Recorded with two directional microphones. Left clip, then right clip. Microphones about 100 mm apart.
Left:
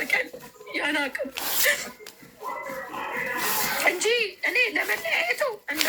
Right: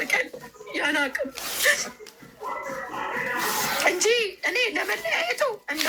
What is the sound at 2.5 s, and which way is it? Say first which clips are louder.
Music: right 1 dB; 25° right (ahead or behind).